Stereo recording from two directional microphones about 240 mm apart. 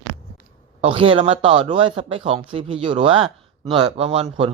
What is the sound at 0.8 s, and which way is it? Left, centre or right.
Speech, right.